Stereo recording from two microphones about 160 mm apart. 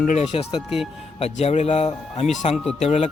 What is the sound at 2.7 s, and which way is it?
Speech, 45° left (ahead or behind).